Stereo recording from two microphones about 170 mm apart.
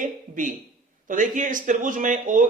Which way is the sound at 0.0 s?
50° right (ahead or behind).